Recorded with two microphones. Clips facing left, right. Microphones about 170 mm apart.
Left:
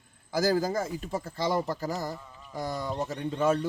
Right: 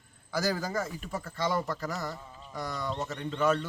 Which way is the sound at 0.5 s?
25° left (ahead or behind).